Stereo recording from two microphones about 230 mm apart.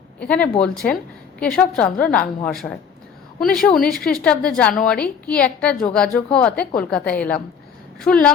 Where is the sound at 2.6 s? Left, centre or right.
Centre.